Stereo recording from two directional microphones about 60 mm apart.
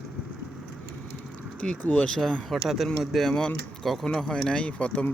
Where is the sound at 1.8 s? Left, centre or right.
Left.